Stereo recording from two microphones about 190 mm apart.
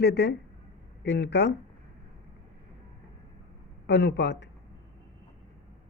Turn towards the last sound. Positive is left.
turn(degrees=65)  # may be behind; listen again after turning